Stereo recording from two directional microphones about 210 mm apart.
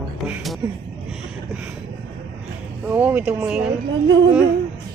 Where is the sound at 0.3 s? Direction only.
Centre (ahead or behind).